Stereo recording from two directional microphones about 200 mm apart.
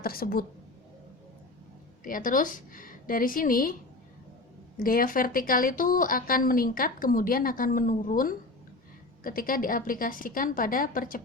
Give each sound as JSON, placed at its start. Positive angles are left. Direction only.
{"t": 0.0, "sound": "a woman's voice", "side_deg": 50}
{"t": 2.0, "sound": "a woman's voice", "side_deg": 45}
{"t": 4.8, "sound": "a woman's voice", "side_deg": 45}